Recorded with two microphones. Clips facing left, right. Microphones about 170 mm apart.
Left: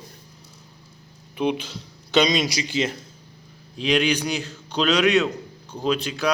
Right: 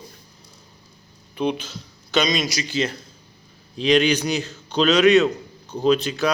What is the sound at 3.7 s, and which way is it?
A man's voice, 5° left (ahead or behind).